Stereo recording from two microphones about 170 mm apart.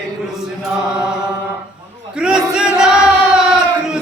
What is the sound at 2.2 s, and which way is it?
Crowd, 5° right (ahead or behind).